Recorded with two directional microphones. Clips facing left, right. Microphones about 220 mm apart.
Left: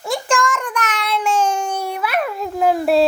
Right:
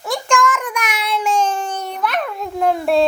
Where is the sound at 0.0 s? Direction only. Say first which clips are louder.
Right 1 dB; centre (ahead or behind).